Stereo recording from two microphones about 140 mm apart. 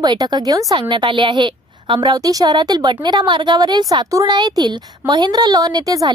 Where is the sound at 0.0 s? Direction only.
30° right (ahead or behind).